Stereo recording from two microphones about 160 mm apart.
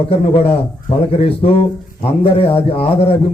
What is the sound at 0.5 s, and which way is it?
A man's voice, 35° left (ahead or behind).